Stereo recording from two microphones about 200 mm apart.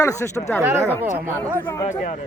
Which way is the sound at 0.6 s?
10° right (ahead or behind).